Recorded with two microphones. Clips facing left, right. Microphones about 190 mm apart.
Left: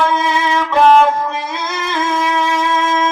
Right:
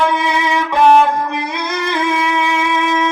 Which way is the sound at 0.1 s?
15° right (ahead or behind).